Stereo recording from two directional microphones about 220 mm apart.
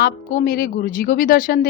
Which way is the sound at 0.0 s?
45° left (ahead or behind).